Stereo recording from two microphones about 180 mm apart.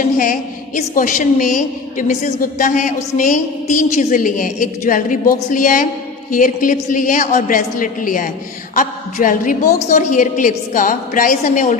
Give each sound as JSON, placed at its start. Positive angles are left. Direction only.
{"t": 0.0, "sound": "a woman's voice", "side_deg": 50}